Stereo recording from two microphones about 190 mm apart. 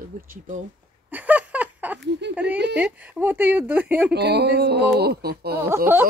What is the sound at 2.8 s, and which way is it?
Speech, 5° right (ahead or behind).